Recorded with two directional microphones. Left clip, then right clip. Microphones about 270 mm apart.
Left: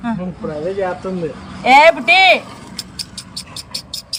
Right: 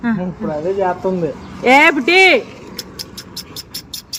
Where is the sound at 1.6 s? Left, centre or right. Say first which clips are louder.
Left 2 dB; centre.